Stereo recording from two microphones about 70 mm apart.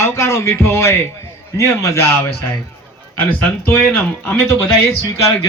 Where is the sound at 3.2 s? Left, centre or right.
Left.